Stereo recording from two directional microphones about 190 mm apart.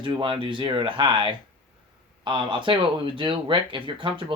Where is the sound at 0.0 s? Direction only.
25° right (ahead or behind).